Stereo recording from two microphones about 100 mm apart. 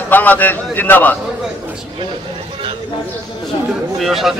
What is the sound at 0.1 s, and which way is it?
A man's voice, 15° left (ahead or behind).